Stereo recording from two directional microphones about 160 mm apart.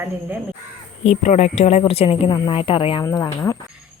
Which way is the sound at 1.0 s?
45° left (ahead or behind).